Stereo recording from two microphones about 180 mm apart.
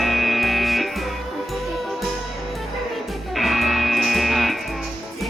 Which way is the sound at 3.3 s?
Centre (ahead or behind).